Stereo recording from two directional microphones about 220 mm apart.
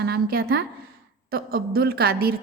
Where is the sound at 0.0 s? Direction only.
45° right (ahead or behind).